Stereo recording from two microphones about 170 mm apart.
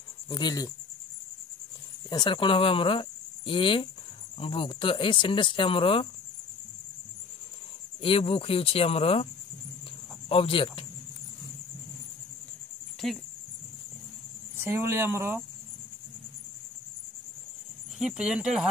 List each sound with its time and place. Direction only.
0.3 s speech: 25° left (ahead or behind)
2.0 s speech: 25° left (ahead or behind)
8.0 s speech: 35° left (ahead or behind)
13.0 s speech: centre (ahead or behind)
14.6 s speech: 15° right (ahead or behind)
17.9 s speech: 5° right (ahead or behind)